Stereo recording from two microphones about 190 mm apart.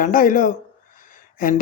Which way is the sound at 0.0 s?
45° left (ahead or behind).